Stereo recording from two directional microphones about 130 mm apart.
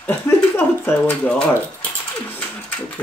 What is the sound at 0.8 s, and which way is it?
A child's voice, 10° left (ahead or behind).